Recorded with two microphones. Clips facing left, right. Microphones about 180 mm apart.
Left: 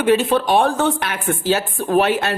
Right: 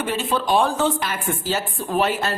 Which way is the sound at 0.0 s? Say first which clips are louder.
Left 8 dB; 65° left (ahead or behind).